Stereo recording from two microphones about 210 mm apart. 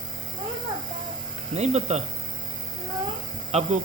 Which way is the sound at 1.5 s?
30° right (ahead or behind).